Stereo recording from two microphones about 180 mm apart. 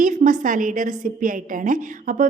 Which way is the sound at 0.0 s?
45° right (ahead or behind).